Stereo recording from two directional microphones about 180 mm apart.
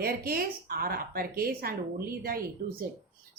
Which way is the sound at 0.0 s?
55° right (ahead or behind).